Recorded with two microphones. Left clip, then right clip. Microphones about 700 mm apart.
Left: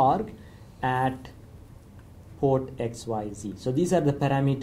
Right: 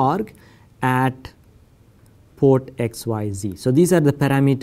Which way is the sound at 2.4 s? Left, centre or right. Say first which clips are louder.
Right 8 dB; right.